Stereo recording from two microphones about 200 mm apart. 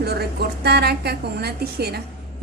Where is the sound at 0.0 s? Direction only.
55° right (ahead or behind).